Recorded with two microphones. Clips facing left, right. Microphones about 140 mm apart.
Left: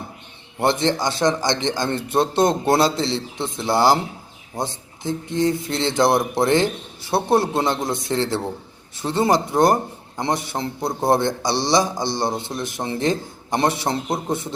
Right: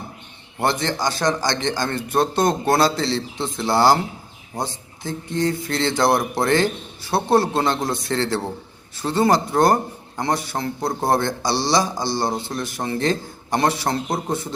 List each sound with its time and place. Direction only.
0.6 s speech: 20° left (ahead or behind)